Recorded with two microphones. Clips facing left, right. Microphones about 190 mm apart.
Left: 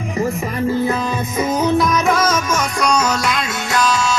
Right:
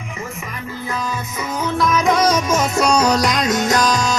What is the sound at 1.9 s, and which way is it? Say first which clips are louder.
Music: right 1 dB; 15° right (ahead or behind).